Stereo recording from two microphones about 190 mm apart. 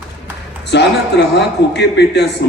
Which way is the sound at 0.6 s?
65° left (ahead or behind).